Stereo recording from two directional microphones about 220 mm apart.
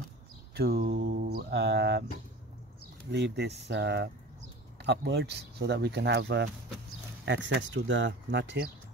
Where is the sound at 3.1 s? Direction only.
50° right (ahead or behind).